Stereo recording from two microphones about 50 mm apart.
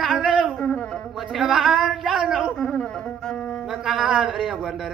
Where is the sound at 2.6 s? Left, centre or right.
Centre.